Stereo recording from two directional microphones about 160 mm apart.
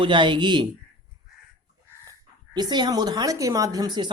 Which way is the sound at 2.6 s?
25° right (ahead or behind).